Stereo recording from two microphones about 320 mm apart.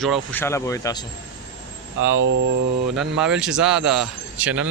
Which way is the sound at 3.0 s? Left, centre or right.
Centre.